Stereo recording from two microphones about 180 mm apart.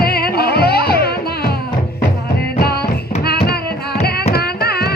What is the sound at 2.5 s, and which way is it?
Music, 60° left (ahead or behind).